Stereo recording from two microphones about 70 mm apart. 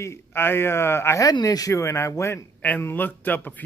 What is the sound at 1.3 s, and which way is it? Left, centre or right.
Speech, left.